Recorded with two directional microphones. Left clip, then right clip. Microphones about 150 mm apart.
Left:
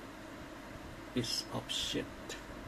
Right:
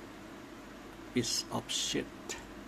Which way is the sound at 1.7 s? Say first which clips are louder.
Right 1 dB; 45° right (ahead or behind).